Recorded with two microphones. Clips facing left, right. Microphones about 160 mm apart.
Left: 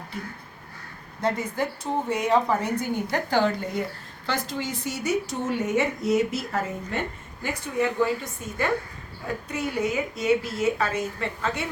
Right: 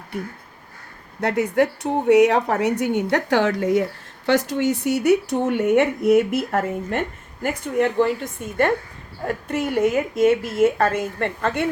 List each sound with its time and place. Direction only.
1.2 s a woman's voice: 70° right (ahead or behind)
4.3 s a woman's voice: 70° right (ahead or behind)